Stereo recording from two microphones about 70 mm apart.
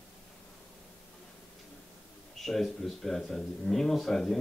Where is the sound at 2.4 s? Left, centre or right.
Centre.